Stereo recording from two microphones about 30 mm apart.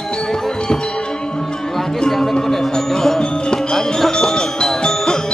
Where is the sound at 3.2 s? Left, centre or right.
Left.